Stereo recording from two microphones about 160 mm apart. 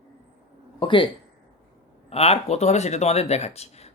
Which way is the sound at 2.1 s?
40° left (ahead or behind).